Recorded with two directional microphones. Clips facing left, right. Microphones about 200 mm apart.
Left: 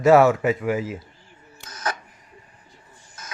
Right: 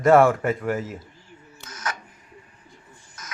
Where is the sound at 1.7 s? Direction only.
35° left (ahead or behind).